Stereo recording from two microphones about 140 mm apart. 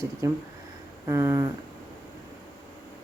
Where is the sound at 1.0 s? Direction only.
20° right (ahead or behind).